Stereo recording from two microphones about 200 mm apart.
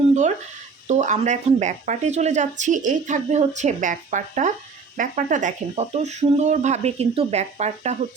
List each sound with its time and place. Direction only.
0.9 s speech: 35° right (ahead or behind)